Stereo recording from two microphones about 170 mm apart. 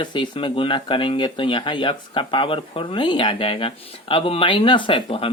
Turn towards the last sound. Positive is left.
turn(degrees=30)  # may be behind; listen again after turning